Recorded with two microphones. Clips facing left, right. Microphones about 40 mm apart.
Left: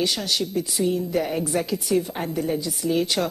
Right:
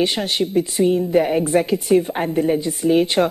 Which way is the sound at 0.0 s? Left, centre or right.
Right.